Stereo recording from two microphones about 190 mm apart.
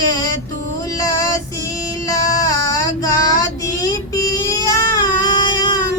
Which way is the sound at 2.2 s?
20° left (ahead or behind).